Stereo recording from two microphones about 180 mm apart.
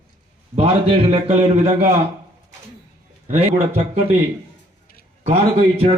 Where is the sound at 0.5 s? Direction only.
30° right (ahead or behind).